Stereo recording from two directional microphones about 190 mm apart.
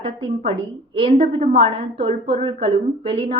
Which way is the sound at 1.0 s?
30° right (ahead or behind).